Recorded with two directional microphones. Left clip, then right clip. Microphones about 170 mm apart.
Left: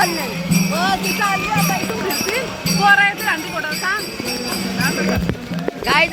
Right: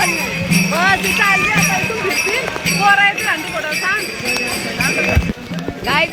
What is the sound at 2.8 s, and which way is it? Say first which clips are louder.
Music: right 1 dB; 60° right (ahead or behind).